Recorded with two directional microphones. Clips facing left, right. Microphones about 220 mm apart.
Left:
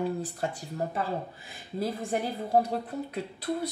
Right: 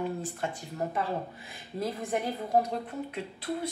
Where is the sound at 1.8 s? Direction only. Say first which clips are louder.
Left 1 dB; 30° left (ahead or behind).